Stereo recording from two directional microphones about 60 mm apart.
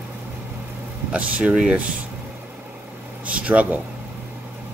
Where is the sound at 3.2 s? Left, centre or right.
Right.